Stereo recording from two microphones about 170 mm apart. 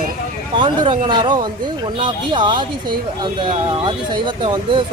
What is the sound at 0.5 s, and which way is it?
Speech, 30° right (ahead or behind).